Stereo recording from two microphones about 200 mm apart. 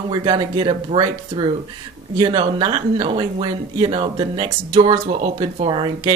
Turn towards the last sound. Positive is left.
turn(degrees=-25)  # may be behind; listen again after turning